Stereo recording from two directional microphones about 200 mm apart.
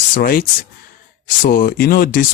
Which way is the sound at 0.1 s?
45° left (ahead or behind).